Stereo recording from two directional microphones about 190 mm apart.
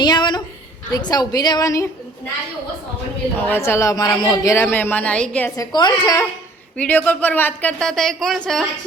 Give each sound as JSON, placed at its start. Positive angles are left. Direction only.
{"t": 0.0, "sound": "a sound", "side_deg": 20}
{"t": 0.9, "sound": "a woman's voice", "side_deg": 20}
{"t": 3.3, "sound": "speech", "side_deg": 10}
{"t": 5.5, "sound": "a woman's voice", "side_deg": 20}
{"t": 6.7, "sound": "speech", "side_deg": 10}